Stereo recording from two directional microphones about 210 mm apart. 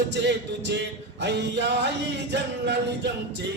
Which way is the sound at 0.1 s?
55° right (ahead or behind).